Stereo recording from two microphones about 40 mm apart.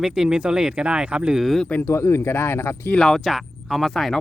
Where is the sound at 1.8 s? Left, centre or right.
Left.